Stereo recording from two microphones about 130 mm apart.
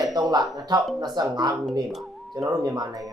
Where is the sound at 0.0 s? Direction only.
30° right (ahead or behind).